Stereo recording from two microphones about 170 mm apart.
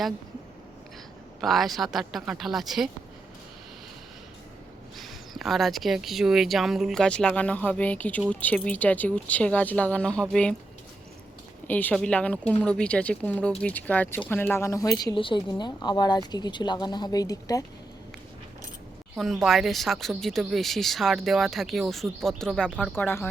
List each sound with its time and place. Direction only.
1.4 s speech: centre (ahead or behind)
4.9 s speech: centre (ahead or behind)
11.7 s speech: 10° left (ahead or behind)
19.1 s speech: centre (ahead or behind)